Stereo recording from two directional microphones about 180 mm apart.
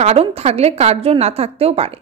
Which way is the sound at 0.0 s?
35° right (ahead or behind).